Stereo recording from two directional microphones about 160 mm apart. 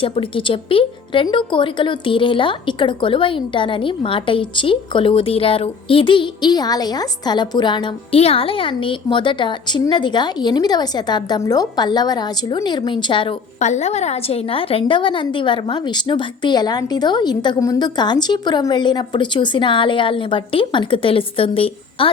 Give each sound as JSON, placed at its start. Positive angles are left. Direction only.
{"t": 0.0, "sound": "a woman's voice", "side_deg": 35}
{"t": 13.6, "sound": "a woman's voice", "side_deg": 45}